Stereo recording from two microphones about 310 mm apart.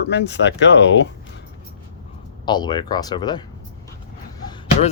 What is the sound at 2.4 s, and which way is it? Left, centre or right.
Speech, centre.